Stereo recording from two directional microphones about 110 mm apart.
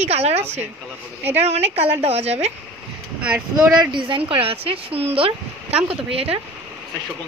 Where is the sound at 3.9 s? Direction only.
50° right (ahead or behind).